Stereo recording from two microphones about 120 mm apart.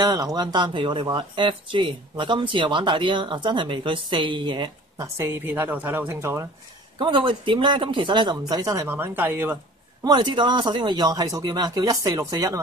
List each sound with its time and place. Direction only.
0.0 s speech: 30° right (ahead or behind)
5.0 s a woman's voice: 25° right (ahead or behind)
7.0 s speech: 40° right (ahead or behind); by 9.6 s 15° right (ahead or behind)
10.0 s speech: 40° right (ahead or behind)